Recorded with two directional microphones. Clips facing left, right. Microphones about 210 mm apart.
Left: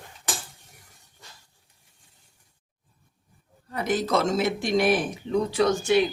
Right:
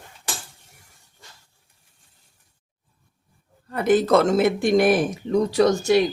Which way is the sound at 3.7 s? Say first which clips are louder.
Right 7 dB; 55° right (ahead or behind).